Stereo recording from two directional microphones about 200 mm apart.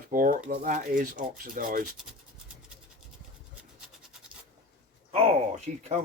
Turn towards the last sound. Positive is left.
turn(degrees=-35)  # may be behind; listen again after turning